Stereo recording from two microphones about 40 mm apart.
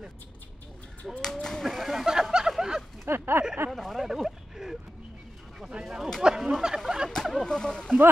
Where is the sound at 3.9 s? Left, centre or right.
Centre.